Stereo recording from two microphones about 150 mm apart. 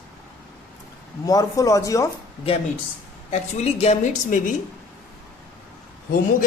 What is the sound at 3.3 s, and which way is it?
A woman's voice, 45° left (ahead or behind).